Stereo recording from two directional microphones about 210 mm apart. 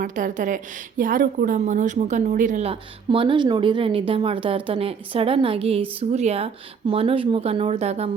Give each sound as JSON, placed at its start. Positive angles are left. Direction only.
{"t": 0.0, "sound": "a woman's voice", "side_deg": -40}